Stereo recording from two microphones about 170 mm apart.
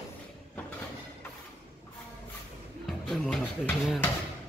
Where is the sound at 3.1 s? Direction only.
Centre (ahead or behind).